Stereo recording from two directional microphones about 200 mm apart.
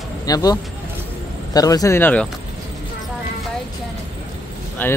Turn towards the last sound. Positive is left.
turn(degrees=10)  # may be behind; listen again after turning